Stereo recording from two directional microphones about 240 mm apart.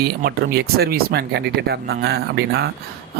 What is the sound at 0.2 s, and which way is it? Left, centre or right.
Speech, right.